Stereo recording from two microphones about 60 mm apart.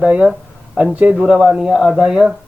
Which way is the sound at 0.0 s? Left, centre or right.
Centre.